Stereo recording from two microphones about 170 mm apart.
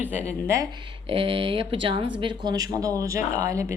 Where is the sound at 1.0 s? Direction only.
30° right (ahead or behind); by 3.7 s 15° right (ahead or behind).